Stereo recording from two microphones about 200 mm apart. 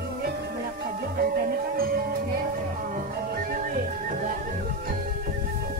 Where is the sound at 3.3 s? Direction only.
45° right (ahead or behind).